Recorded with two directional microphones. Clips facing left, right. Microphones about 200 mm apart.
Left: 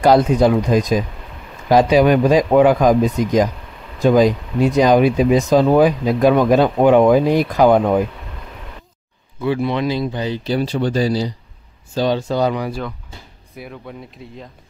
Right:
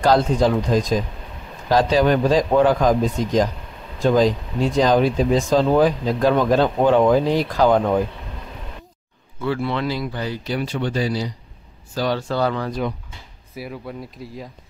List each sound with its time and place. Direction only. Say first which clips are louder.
0.1 s speech: left 4 dB; 15° left (ahead or behind)
9.4 s speech: left 4 dB; 15° left (ahead or behind); by 11.3 s 35° left (ahead or behind)
11.9 s speech: left 4 dB; 20° left (ahead or behind)
13.6 s speech: right 2 dB; 5° right (ahead or behind)